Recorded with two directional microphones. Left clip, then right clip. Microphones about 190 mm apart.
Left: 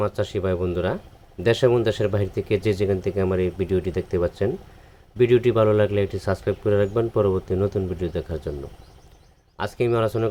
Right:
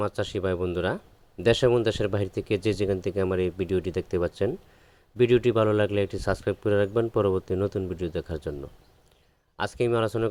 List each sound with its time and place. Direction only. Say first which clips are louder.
0.0 s speech: left 4 dB; 45° right (ahead or behind)
9.6 s speech: left 3 dB; 45° right (ahead or behind)